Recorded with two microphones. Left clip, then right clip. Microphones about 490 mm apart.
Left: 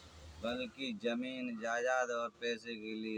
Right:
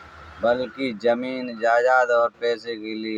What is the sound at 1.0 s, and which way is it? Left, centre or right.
Speech, left.